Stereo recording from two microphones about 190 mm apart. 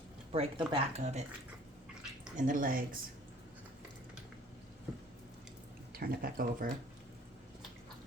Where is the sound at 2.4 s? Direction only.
45° right (ahead or behind).